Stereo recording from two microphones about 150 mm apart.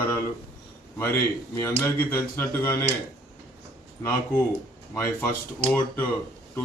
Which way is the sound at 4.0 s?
20° left (ahead or behind).